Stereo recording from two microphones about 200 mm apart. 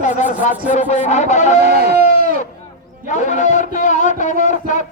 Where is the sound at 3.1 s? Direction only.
35° left (ahead or behind).